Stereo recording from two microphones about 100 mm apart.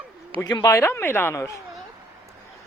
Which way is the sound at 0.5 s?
30° left (ahead or behind).